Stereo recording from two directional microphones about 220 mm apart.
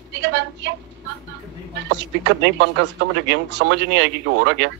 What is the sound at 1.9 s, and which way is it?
Speech, 50° right (ahead or behind).